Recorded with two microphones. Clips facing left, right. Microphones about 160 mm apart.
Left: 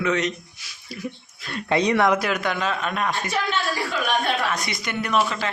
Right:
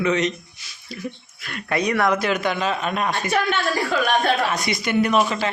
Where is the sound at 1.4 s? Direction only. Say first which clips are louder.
Left 2 dB; 25° left (ahead or behind).